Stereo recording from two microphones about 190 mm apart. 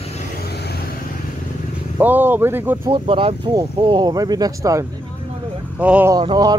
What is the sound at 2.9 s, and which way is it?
Speech, 30° right (ahead or behind).